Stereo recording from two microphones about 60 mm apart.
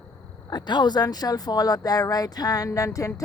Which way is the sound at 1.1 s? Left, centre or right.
Left.